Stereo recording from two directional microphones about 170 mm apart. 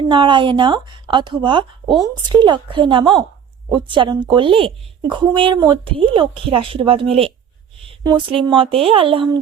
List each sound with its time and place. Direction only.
0.1 s a woman's voice: 30° right (ahead or behind)